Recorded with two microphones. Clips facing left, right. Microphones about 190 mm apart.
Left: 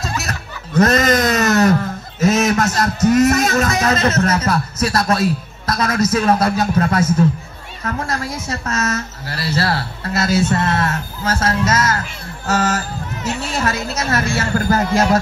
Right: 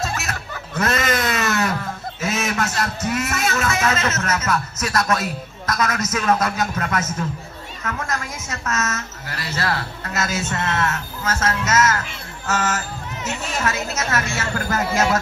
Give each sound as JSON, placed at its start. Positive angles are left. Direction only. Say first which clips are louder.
{"t": 0.0, "sound": "music", "louder": "left 2 dB", "side_deg": 40}
{"t": 6.1, "sound": "a woman's voice", "louder": "left 3 dB", "side_deg": 35}